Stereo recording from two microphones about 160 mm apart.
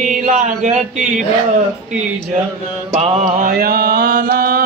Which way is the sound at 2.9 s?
40° right (ahead or behind).